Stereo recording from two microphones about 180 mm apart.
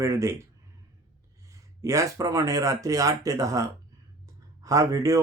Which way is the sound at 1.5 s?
15° right (ahead or behind).